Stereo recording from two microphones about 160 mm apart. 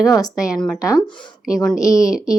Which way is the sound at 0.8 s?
20° left (ahead or behind).